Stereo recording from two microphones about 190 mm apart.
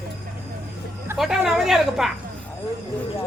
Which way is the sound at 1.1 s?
Centre (ahead or behind).